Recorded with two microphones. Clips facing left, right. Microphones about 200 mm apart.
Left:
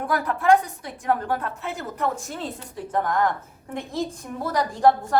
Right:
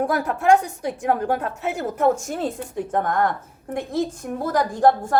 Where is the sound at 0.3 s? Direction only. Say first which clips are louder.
Even; 45° right (ahead or behind).